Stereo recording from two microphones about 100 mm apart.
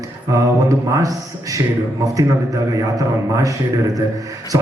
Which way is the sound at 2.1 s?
35° right (ahead or behind).